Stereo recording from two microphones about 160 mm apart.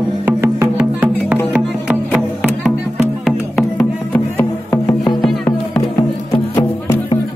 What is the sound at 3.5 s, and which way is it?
Music, 10° left (ahead or behind).